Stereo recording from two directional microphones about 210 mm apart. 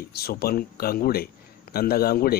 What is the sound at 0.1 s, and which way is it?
Speech, 50° left (ahead or behind).